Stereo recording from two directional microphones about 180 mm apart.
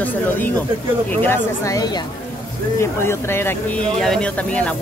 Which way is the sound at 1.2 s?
15° left (ahead or behind).